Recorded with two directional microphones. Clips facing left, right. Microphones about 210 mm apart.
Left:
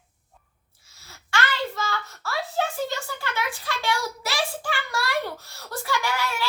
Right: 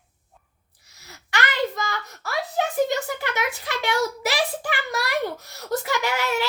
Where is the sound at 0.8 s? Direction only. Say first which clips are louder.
Right 4 dB; 20° right (ahead or behind).